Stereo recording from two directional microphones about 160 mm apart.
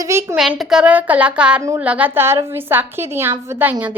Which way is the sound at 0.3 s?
Centre (ahead or behind).